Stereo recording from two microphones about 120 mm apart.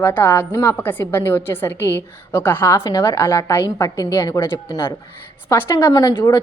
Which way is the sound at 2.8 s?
35° left (ahead or behind).